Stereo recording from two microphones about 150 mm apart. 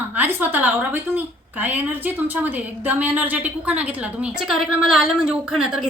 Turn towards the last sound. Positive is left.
turn(degrees=-5)  # may be behind; listen again after turning